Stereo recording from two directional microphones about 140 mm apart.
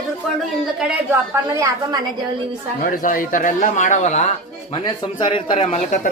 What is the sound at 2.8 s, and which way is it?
A man's voice, 80° left.